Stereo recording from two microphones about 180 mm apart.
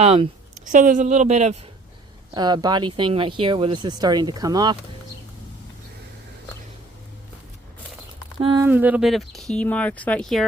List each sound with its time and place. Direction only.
0.0 s speech: 35° right (ahead or behind)
2.3 s speech: 25° right (ahead or behind)
8.4 s speech: 25° right (ahead or behind)
8.6 s speech: 10° right (ahead or behind)